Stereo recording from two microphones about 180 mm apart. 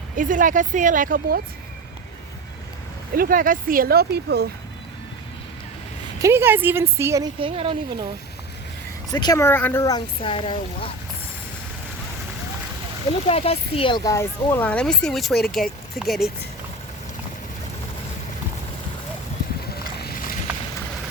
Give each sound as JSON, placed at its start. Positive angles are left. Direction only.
{"t": 0.2, "sound": "speech", "side_deg": -45}
{"t": 3.2, "sound": "speech", "side_deg": -50}
{"t": 6.2, "sound": "a woman's voice", "side_deg": -15}
{"t": 7.3, "sound": "speech", "side_deg": -30}
{"t": 9.0, "sound": "speech", "side_deg": 20}
{"t": 13.2, "sound": "speech", "side_deg": 35}
{"t": 19.7, "sound": "vehicle", "side_deg": 60}